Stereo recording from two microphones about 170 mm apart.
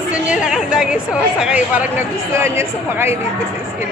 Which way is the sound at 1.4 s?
5° right (ahead or behind).